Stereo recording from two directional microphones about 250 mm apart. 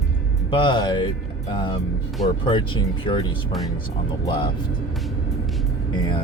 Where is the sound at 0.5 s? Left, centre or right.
Centre.